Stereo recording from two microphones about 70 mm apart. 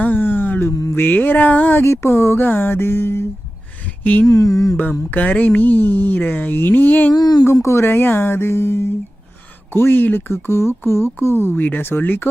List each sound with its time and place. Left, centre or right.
0.0 s a sound: left
0.9 s speech: left
1.8 s speech: left
2.4 s speech: left
4.0 s a sound: left
4.3 s mantra: left
4.8 s speech: left
7.1 s speech: left
7.5 s speech: left
11.4 s speech: left